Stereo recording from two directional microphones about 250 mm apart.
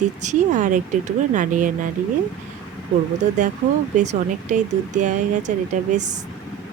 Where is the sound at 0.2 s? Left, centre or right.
Right.